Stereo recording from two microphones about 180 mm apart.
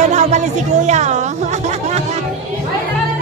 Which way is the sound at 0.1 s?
40° right (ahead or behind).